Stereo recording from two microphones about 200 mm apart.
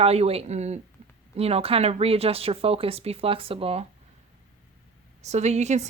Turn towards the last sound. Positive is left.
turn(degrees=-35)  # may be behind; listen again after turning